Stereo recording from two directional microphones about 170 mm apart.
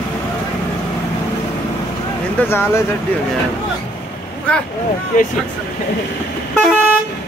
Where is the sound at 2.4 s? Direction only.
15° left (ahead or behind).